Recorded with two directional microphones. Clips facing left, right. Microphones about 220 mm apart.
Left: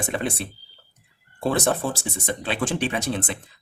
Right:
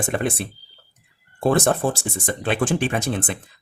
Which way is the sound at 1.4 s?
50° right (ahead or behind).